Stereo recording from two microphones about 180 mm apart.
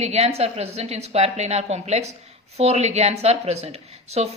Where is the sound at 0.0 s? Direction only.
35° right (ahead or behind).